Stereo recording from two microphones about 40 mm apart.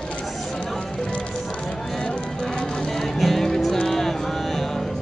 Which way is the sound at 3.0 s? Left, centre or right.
Centre.